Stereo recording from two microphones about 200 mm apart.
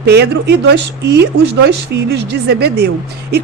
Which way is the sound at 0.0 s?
55° right (ahead or behind).